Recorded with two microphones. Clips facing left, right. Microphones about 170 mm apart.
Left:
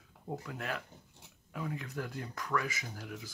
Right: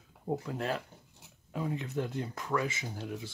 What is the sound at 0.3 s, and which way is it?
Speech, 30° right (ahead or behind).